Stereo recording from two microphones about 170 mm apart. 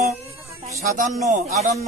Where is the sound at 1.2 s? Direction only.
45° right (ahead or behind).